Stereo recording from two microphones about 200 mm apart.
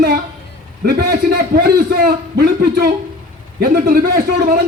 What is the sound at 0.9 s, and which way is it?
A man's voice, 50° right (ahead or behind).